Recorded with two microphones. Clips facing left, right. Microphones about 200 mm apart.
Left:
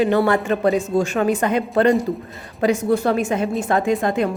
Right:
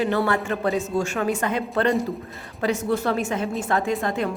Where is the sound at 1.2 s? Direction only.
20° left (ahead or behind).